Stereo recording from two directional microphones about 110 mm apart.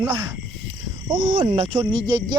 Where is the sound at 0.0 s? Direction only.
40° right (ahead or behind).